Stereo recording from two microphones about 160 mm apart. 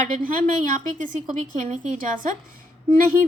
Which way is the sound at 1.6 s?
55° right (ahead or behind).